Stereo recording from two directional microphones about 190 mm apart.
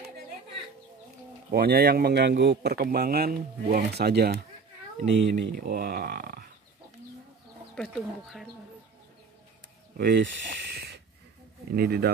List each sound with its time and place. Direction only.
1.5 s speech: 55° right (ahead or behind)
5.1 s speech: 75° right (ahead or behind)
5.6 s speech: 50° right (ahead or behind)
7.7 s speech: centre (ahead or behind)
9.9 s speech: 50° right (ahead or behind)
11.7 s speech: 55° right (ahead or behind)